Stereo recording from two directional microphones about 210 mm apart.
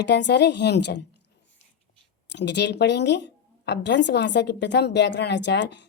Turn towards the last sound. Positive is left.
turn(degrees=55)  # may be behind; listen again after turning